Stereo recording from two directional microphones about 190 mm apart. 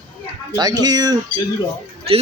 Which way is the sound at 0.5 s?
20° right (ahead or behind).